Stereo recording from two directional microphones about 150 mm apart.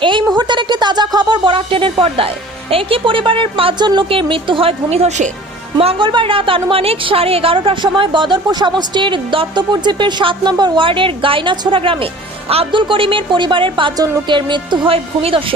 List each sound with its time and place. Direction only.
0.0 s a sound: 35° right (ahead or behind)
0.3 s speech: 30° right (ahead or behind); by 5.3 s 50° right (ahead or behind)
5.7 s a woman's voice: 35° right (ahead or behind)